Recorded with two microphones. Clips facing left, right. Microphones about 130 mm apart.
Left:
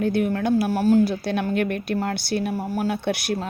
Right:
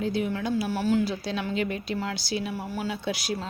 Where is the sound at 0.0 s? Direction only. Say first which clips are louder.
Left 6 dB; 60° left (ahead or behind).